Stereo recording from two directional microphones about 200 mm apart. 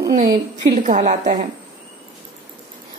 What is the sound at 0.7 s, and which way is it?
Speech, 45° right (ahead or behind).